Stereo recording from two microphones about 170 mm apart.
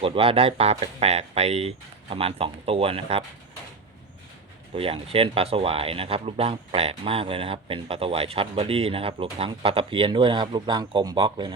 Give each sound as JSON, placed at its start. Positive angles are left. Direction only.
{"t": 0.0, "sound": "speech", "side_deg": -35}
{"t": 4.7, "sound": "speech", "side_deg": -35}